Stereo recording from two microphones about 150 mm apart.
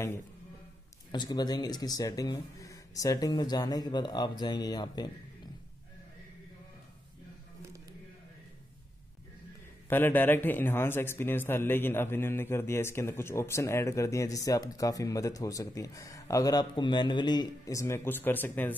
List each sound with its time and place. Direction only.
1.1 s speech: 30° left (ahead or behind)
9.8 s a man's voice: 15° left (ahead or behind)